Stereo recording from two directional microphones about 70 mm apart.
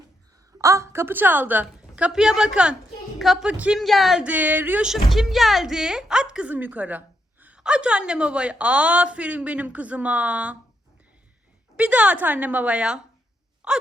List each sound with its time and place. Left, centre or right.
0.6 s a woman's voice: right
2.0 s a woman's voice: centre
3.8 s speech: centre
4.2 s a woman's voice: right
4.8 s a woman's voice: centre; by 7.6 s right
7.6 s a woman's voice: centre
11.8 s a woman's voice: right
13.6 s wail: centre